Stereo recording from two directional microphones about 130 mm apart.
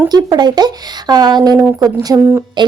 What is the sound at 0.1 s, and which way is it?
Speech, 30° right (ahead or behind).